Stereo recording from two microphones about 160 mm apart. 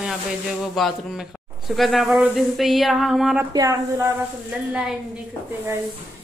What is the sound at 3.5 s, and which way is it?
Speech, 20° right (ahead or behind).